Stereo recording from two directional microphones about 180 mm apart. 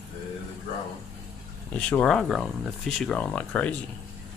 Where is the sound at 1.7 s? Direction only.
5° left (ahead or behind).